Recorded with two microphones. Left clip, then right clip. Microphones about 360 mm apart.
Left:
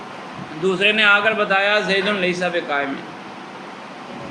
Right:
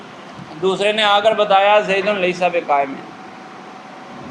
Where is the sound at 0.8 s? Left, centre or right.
Centre.